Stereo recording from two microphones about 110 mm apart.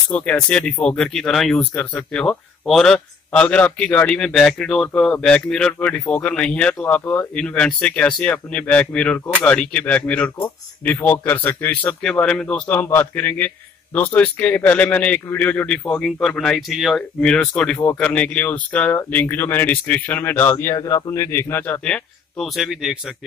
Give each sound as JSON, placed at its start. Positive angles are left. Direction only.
{"t": 0.1, "sound": "a man's voice", "side_deg": 10}
{"t": 20.7, "sound": "speech", "side_deg": 30}
{"t": 21.8, "sound": "speech", "side_deg": 10}
{"t": 22.6, "sound": "speech", "side_deg": -5}